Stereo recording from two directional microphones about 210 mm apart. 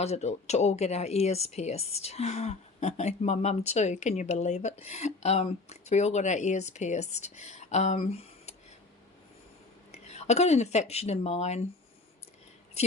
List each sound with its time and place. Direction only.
0.0 s speech: 30° left (ahead or behind)
9.9 s speech: 30° left (ahead or behind)